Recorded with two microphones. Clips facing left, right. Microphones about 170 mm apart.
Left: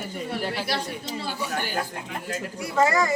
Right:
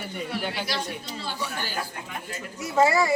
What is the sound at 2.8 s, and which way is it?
Speech, 10° right (ahead or behind).